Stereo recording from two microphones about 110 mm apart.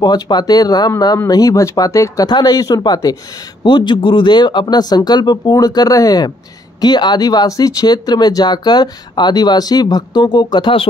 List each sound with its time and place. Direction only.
0.0 s speech: 40° left (ahead or behind)